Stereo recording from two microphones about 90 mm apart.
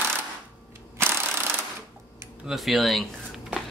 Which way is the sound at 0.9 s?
25° right (ahead or behind).